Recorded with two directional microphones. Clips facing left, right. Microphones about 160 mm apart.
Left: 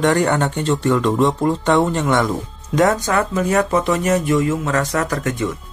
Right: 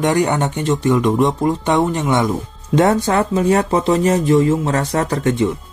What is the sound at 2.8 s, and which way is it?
Speech, 30° right (ahead or behind).